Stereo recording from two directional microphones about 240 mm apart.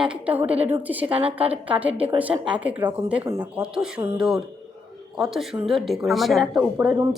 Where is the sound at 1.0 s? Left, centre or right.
Right.